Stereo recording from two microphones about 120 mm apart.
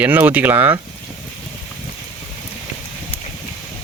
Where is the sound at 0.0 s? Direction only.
15° right (ahead or behind).